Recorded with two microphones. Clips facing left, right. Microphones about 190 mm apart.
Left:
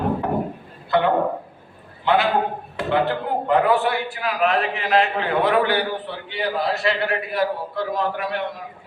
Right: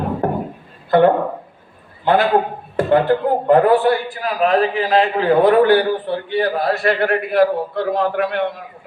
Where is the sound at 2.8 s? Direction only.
45° right (ahead or behind).